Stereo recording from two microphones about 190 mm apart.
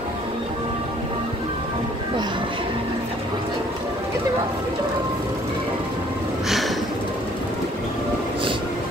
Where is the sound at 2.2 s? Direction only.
25° right (ahead or behind).